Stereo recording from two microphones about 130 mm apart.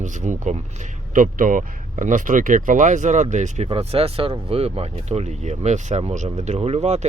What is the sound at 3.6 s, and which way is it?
Speech, 50° right (ahead or behind).